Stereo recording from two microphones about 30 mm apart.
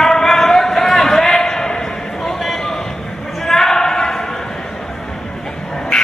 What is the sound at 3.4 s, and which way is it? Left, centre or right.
Basketball bounce, centre.